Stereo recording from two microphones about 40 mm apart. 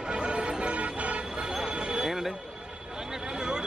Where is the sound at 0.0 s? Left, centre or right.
Right.